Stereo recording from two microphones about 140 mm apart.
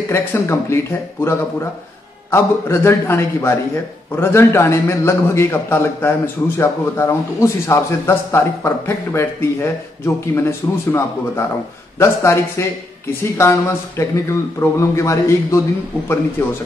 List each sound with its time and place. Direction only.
0.1 s a man's voice: 20° left (ahead or behind)